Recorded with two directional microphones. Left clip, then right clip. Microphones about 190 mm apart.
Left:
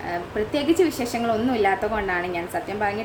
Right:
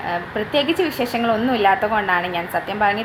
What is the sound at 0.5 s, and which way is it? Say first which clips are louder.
A woman's voice: right 2 dB; 15° left (ahead or behind).